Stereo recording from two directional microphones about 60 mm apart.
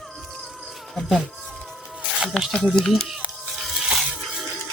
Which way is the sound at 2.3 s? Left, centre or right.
Centre.